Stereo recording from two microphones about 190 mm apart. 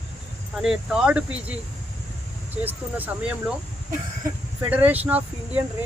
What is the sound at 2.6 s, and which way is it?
Speech, 10° right (ahead or behind).